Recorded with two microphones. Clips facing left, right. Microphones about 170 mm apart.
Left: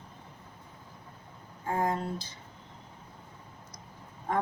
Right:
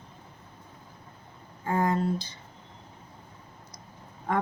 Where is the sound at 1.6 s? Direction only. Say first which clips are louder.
Right 4 dB; 80° right.